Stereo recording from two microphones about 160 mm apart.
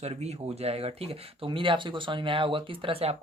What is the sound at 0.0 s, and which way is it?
Speech, 40° right (ahead or behind).